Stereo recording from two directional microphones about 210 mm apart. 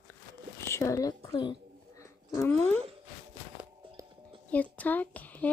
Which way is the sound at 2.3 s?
10° left (ahead or behind).